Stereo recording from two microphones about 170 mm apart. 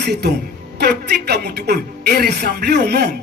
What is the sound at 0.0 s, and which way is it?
Speech, 75° right (ahead or behind).